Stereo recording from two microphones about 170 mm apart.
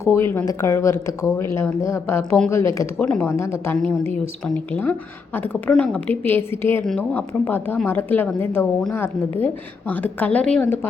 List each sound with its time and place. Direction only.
0.0 s speech: 15° left (ahead or behind)